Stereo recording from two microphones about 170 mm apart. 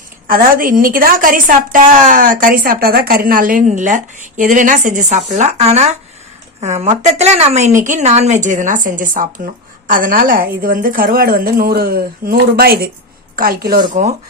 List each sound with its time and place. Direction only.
0.3 s a woman's voice: 55° right (ahead or behind)